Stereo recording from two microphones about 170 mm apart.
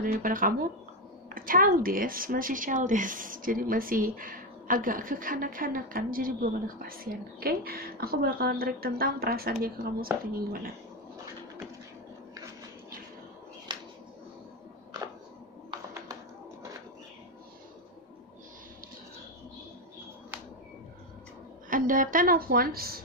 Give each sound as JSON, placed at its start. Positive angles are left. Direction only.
{"t": 0.0, "sound": "speech", "side_deg": -60}
{"t": 13.7, "sound": "a sound", "side_deg": -25}
{"t": 21.6, "sound": "speech", "side_deg": -55}